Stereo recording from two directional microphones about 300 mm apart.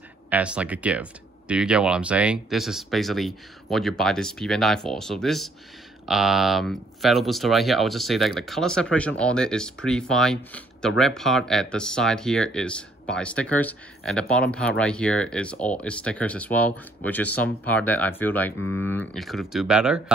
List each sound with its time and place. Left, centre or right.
0.3 s speech: centre
18.6 s speech: left
18.9 s speech: centre